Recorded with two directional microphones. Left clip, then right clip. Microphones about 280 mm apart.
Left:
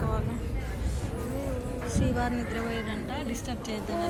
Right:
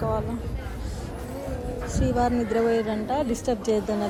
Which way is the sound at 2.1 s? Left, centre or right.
Centre.